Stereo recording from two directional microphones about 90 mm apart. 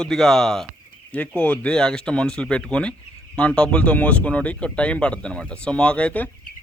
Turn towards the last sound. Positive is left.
turn(degrees=15)  # may be behind; listen again after turning